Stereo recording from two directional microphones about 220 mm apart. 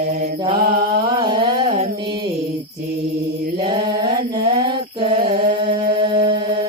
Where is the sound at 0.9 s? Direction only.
20° right (ahead or behind).